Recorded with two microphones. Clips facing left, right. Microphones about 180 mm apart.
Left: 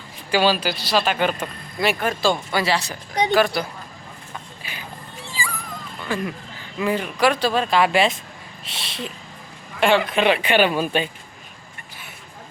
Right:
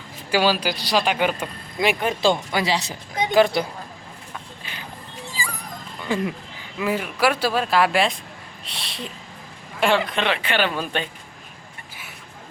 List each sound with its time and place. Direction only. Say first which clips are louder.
0.3 s speech: left 1 dB; 10° right (ahead or behind)
5.2 s dog: left 1 dB; 40° right (ahead or behind)
6.1 s a sound: right 2 dB; 20° right (ahead or behind)
6.7 s speech: left 1 dB; 5° right (ahead or behind)
10.2 s speech: left 5 dB; 15° left (ahead or behind)